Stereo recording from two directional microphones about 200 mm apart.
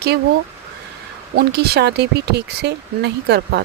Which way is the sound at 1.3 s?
55° right (ahead or behind).